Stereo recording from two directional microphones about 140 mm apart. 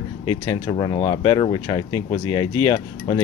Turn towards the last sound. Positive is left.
turn(degrees=35)  # may be behind; listen again after turning